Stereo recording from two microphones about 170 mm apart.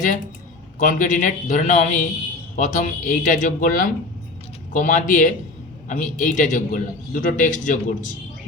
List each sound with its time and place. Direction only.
0.8 s a man's voice: 50° left (ahead or behind)